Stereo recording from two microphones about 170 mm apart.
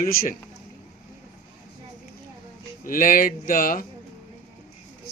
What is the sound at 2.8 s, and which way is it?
Speech, 55° left (ahead or behind).